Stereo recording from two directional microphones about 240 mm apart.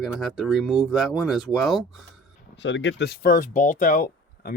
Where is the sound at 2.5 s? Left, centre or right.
Left.